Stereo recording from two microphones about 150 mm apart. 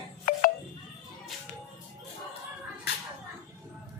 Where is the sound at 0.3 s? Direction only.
70° left (ahead or behind).